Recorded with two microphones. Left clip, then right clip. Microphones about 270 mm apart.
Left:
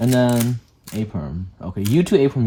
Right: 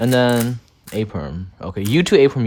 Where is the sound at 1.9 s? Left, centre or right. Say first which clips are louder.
Right 4 dB; left.